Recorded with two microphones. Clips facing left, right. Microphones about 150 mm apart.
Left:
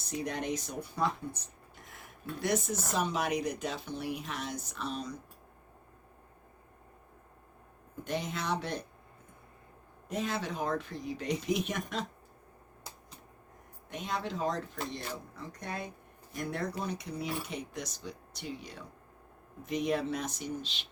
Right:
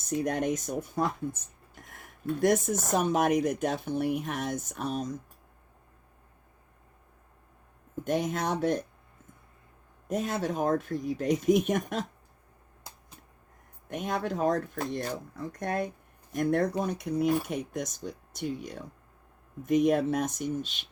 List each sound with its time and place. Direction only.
0.1 s speech: 50° right (ahead or behind)
8.0 s speech: 50° right (ahead or behind)
10.1 s speech: 45° right (ahead or behind)
13.9 s speech: 50° right (ahead or behind)